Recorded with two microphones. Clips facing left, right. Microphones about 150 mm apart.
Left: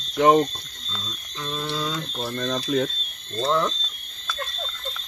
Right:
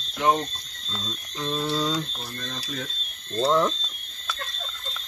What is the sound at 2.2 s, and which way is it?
Speech, 60° left (ahead or behind).